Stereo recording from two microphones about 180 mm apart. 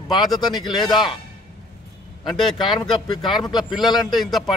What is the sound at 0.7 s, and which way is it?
Speech, 25° left (ahead or behind).